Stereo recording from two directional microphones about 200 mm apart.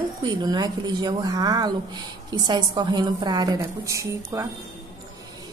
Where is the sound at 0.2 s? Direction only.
20° right (ahead or behind).